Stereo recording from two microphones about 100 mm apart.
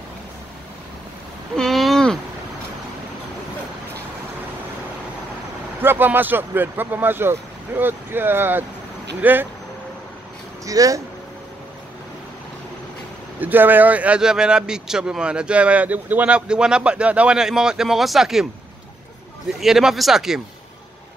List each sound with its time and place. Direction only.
1.6 s a sound: centre (ahead or behind)
5.8 s speech: 20° right (ahead or behind)
10.6 s speech: 35° right (ahead or behind)
13.4 s speech: 20° right (ahead or behind)
19.6 s speech: 5° right (ahead or behind)